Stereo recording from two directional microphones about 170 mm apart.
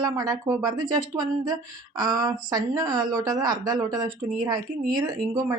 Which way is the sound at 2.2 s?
20° right (ahead or behind).